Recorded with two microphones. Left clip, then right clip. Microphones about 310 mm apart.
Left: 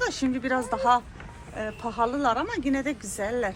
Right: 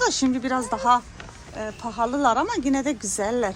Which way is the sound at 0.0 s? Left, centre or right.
Centre.